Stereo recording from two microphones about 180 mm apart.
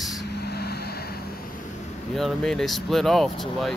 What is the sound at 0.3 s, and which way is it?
Vehicle, 65° left (ahead or behind).